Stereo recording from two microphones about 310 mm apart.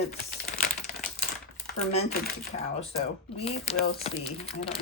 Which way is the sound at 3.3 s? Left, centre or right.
Centre.